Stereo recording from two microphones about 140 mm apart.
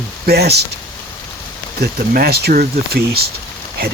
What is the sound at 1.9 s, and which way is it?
Speech, 90° right.